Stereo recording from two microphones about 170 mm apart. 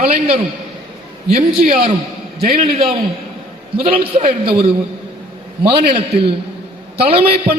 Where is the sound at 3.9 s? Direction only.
30° right (ahead or behind).